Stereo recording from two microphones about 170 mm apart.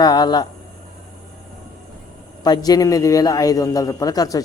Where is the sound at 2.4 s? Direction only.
25° left (ahead or behind).